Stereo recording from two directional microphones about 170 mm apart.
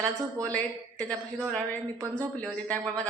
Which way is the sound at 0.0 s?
20° right (ahead or behind).